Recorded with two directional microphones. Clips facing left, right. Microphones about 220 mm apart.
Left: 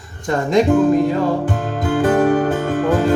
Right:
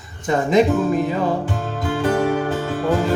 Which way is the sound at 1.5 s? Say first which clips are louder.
Left 4 dB; 50° left (ahead or behind).